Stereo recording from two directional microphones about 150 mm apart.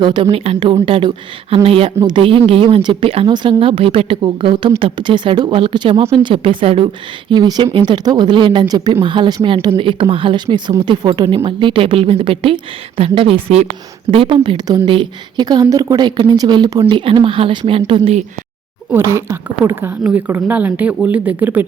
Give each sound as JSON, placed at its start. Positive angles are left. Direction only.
{"t": 0.0, "sound": "speech", "side_deg": -30}
{"t": 18.9, "sound": "a woman's voice", "side_deg": -15}